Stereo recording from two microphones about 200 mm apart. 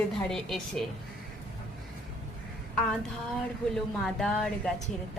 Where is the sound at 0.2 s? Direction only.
Centre (ahead or behind).